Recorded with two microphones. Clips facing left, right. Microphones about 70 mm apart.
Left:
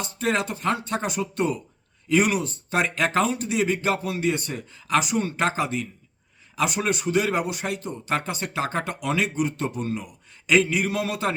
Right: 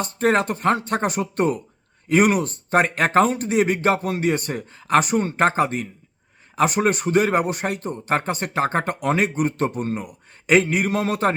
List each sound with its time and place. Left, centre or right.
0.0 s speech: right